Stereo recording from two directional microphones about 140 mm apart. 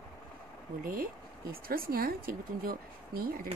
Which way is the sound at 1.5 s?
90° right.